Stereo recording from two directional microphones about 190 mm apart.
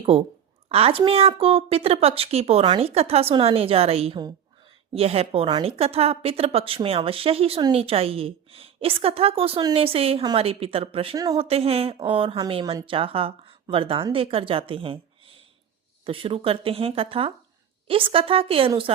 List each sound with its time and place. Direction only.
0.1 s a woman's voice: 30° right (ahead or behind)